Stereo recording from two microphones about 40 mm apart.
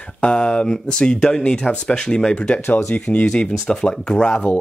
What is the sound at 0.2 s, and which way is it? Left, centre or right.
Speech, left.